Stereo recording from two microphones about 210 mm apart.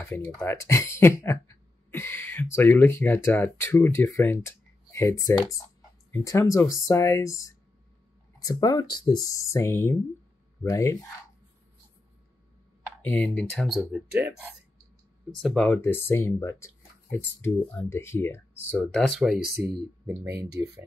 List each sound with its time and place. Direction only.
0.0 s speech: 10° left (ahead or behind)
6.1 s speech: 15° left (ahead or behind)
13.0 s speech: 10° left (ahead or behind)
15.4 s speech: 5° left (ahead or behind)
19.4 s speech: 50° right (ahead or behind)
20.6 s speech: 10° right (ahead or behind)